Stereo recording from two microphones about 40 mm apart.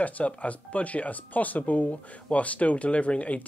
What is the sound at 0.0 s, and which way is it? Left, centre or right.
Speech, left.